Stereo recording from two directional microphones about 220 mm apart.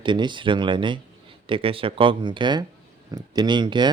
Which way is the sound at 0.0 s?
20° right (ahead or behind).